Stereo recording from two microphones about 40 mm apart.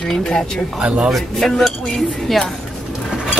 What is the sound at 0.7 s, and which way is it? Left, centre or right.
Speech, right.